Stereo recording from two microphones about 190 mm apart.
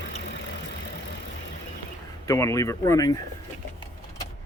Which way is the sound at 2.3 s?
15° left (ahead or behind).